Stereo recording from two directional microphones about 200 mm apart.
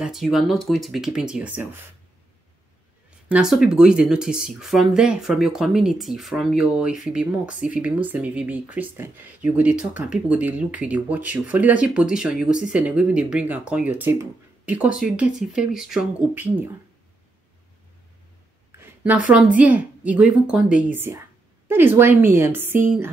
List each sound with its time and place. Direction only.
0.0 s speech: centre (ahead or behind)
3.3 s speech: 5° right (ahead or behind)
18.8 s speech: 5° right (ahead or behind)